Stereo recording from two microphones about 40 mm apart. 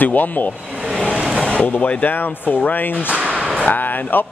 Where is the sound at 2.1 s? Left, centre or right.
Left.